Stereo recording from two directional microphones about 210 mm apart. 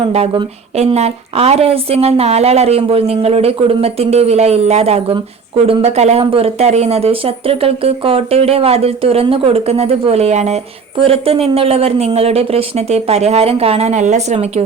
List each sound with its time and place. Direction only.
0.0 s a woman's voice: 25° right (ahead or behind)